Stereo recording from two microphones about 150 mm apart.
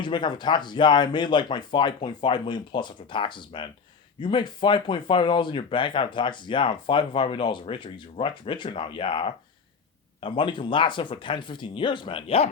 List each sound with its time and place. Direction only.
0.0 s speech: 30° left (ahead or behind)